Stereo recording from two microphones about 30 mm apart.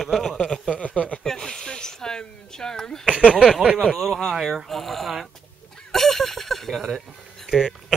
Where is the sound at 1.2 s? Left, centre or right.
Centre.